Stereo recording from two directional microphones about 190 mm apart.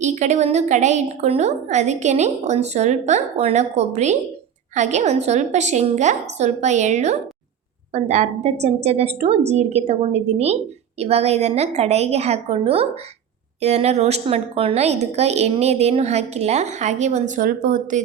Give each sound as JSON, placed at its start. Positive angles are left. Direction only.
{"t": 0.0, "sound": "a woman's voice", "side_deg": -40}